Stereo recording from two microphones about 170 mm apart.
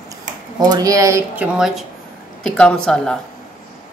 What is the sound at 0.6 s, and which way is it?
Speech, 20° right (ahead or behind).